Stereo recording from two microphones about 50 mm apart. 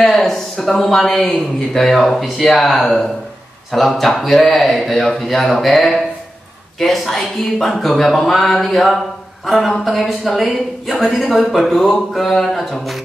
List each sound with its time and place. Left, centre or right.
0.0 s speech: centre